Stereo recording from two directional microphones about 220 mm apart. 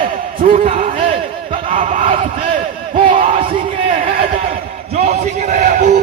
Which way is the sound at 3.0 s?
25° right (ahead or behind).